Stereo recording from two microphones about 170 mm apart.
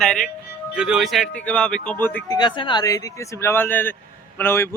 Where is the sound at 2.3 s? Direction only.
25° left (ahead or behind).